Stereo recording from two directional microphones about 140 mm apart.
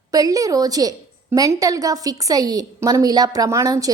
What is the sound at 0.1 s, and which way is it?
A woman's voice, 25° right (ahead or behind).